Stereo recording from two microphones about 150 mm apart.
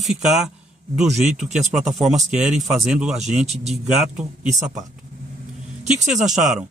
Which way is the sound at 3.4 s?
45° right (ahead or behind).